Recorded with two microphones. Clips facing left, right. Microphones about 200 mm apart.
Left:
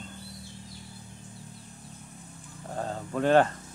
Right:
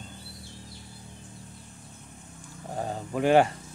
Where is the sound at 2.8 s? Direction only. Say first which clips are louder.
Right 1 dB; 15° right (ahead or behind).